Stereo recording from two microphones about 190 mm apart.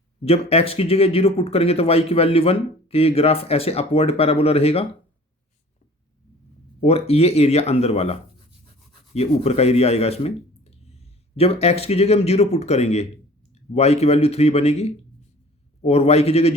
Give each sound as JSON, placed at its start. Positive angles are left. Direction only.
{"t": 0.5, "sound": "speech", "side_deg": 30}
{"t": 6.8, "sound": "speech", "side_deg": 30}